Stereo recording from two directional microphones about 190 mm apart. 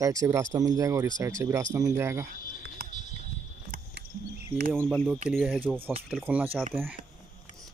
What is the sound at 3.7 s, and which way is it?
Cricket, 50° right (ahead or behind).